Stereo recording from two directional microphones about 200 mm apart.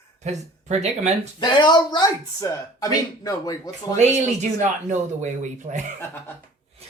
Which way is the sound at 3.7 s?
35° right (ahead or behind).